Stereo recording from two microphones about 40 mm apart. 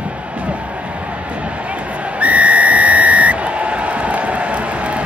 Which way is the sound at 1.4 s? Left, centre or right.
Right.